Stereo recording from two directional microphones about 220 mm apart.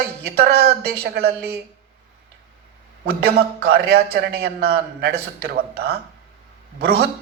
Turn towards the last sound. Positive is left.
turn(degrees=-45)  # may be behind; listen again after turning